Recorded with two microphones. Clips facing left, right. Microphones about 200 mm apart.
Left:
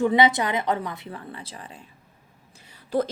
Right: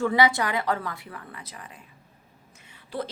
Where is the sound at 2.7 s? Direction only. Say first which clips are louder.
Left 8 dB; 45° left (ahead or behind).